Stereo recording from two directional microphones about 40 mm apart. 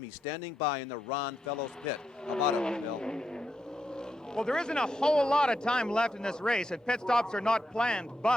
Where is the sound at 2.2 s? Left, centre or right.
Left.